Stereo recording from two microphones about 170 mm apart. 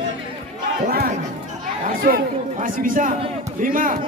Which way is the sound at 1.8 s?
55° right (ahead or behind).